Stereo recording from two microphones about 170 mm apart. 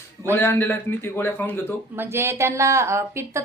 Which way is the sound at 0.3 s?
15° left (ahead or behind).